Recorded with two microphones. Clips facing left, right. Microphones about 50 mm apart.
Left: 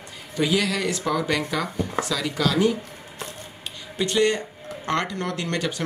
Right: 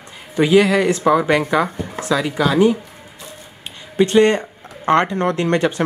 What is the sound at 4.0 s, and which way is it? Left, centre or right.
Speech, right.